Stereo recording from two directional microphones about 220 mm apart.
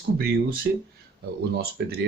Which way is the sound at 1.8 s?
50° right (ahead or behind).